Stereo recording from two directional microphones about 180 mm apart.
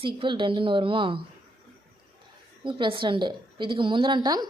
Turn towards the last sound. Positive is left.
turn(degrees=-25)  # may be behind; listen again after turning